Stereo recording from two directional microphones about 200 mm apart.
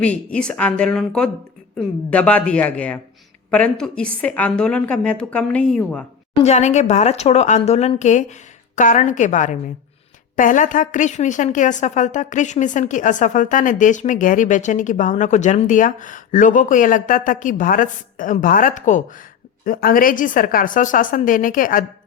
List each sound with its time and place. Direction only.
0.0 s a woman's voice: 5° left (ahead or behind)
6.4 s a woman's voice: 35° left (ahead or behind)